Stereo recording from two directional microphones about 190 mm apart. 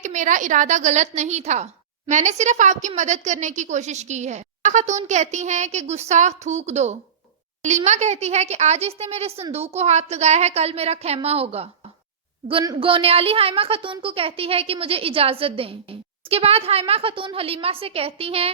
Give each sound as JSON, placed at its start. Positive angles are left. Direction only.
{"t": 0.0, "sound": "a woman's voice", "side_deg": -40}